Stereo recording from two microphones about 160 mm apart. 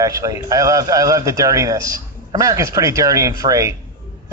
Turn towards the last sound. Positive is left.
turn(degrees=-20)  # may be behind; listen again after turning